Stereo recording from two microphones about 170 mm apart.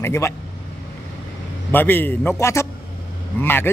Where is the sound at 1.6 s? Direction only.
10° left (ahead or behind).